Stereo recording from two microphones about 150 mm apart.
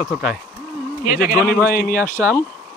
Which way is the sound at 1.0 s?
65° left (ahead or behind).